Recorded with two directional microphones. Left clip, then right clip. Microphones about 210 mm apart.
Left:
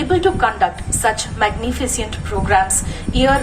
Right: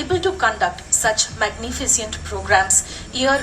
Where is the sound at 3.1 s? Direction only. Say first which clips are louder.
Left 3 dB; 30° left (ahead or behind).